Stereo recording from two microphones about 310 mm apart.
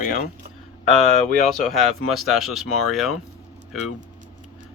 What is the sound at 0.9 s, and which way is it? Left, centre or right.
Speech, centre.